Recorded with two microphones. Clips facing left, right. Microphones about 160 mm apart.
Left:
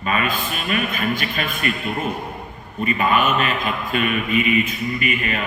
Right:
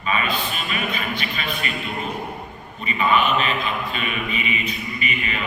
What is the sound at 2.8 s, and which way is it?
A man's voice, 45° left (ahead or behind).